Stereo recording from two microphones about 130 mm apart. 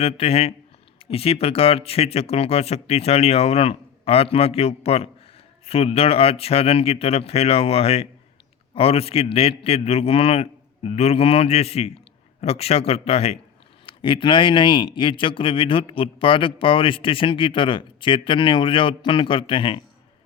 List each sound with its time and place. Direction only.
0.0 s speech: 50° left (ahead or behind)
13.8 s speech: 40° left (ahead or behind)